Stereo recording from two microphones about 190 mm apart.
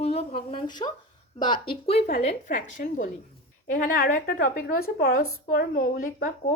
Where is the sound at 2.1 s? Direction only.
40° left (ahead or behind).